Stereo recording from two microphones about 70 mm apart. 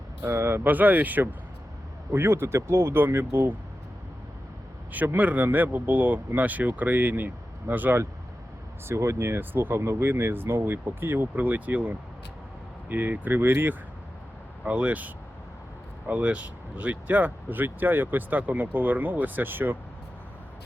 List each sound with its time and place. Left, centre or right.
0.2 s speech: right
2.1 s speech: right
4.9 s speech: right
8.9 s speech: right
14.6 s speech: centre